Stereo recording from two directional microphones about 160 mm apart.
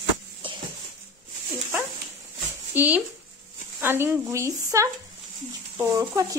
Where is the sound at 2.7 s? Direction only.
10° right (ahead or behind).